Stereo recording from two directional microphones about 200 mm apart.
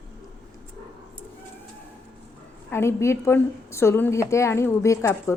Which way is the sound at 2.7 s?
15° left (ahead or behind).